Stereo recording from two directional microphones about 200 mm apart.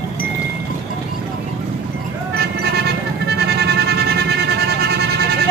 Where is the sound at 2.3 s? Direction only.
55° right (ahead or behind).